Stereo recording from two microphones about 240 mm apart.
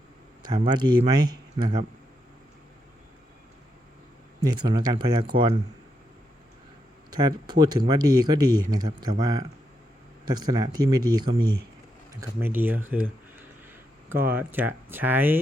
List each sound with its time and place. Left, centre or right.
0.4 s speech: centre
4.5 s speech: centre
7.1 s speech: centre
14.1 s speech: centre